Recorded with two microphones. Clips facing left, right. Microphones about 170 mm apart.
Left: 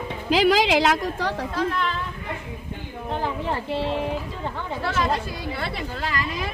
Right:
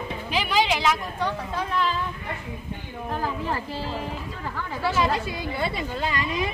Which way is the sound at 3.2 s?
30° left (ahead or behind).